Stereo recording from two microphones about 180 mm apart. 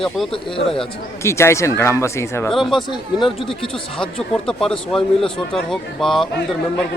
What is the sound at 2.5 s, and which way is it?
Speech, centre (ahead or behind).